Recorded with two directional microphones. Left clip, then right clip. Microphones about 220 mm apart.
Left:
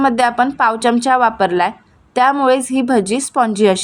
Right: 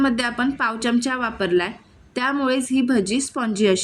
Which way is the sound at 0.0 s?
15° left (ahead or behind).